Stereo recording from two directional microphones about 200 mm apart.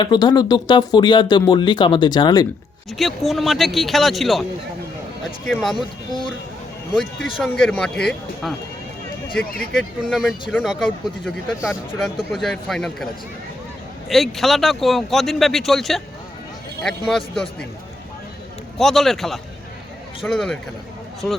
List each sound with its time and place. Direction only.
0.0 s speech: 20° left (ahead or behind)
3.0 s speech: centre (ahead or behind)
5.5 s speech: centre (ahead or behind)
6.9 s speech: centre (ahead or behind)
10.1 s speech: centre (ahead or behind)
14.1 s speech: centre (ahead or behind)
18.8 s speech: centre (ahead or behind)